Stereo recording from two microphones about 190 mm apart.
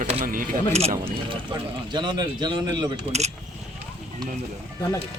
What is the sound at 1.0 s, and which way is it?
Speech, 25° right (ahead or behind).